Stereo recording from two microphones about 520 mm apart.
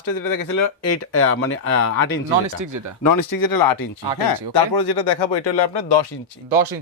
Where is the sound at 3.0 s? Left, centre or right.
Left.